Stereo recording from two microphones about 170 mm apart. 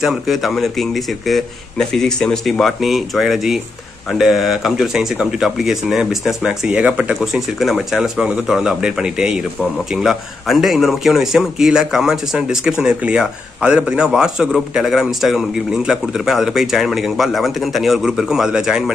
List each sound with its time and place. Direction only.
0.0 s speech: centre (ahead or behind)